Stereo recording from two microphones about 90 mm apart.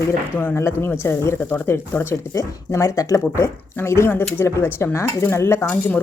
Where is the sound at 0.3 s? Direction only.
25° left (ahead or behind).